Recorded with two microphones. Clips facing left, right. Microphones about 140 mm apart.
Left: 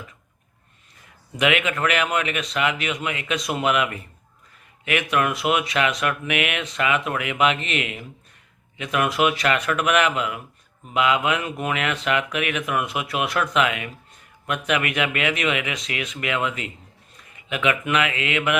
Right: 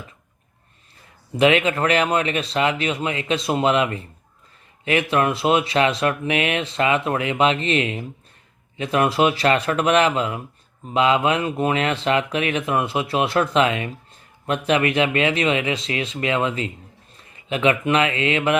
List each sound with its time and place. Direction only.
1.4 s speech: 30° right (ahead or behind)